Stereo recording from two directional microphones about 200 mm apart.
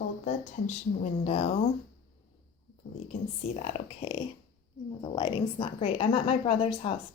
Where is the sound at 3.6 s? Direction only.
25° left (ahead or behind).